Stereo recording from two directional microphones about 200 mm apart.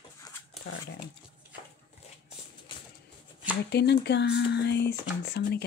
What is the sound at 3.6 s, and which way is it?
Speech, 55° left (ahead or behind).